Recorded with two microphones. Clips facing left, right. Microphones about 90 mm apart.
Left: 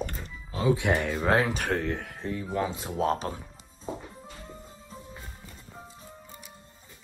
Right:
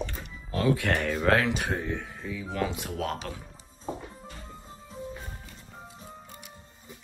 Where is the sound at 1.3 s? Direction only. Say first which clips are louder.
Right 1 dB; 30° left (ahead or behind).